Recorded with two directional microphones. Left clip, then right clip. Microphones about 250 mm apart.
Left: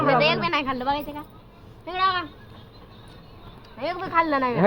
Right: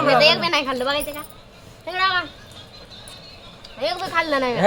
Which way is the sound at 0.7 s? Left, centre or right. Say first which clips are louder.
Right 3 dB; right.